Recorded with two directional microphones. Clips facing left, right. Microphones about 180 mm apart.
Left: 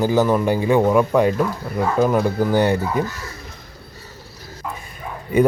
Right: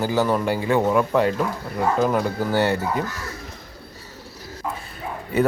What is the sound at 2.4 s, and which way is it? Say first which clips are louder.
Speech: left 4 dB; 15° left (ahead or behind).